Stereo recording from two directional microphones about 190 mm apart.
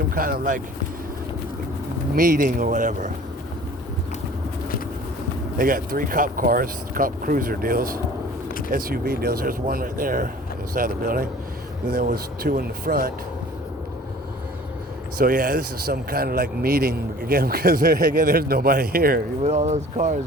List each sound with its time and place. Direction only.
0.1 s speech: 50° right (ahead or behind)
2.1 s speech: 45° right (ahead or behind)
5.5 s speech: 50° right (ahead or behind)
15.2 s speech: 45° right (ahead or behind)
19.5 s speech: 35° right (ahead or behind)